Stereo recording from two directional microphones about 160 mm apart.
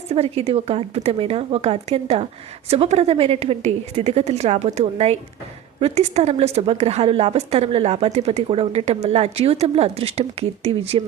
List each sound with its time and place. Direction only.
0.1 s a woman's voice: 40° right (ahead or behind)